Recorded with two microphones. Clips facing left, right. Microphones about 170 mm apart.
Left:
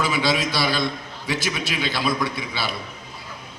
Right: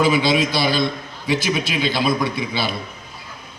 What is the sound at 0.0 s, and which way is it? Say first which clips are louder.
A man's voice: right 5 dB; 15° right (ahead or behind).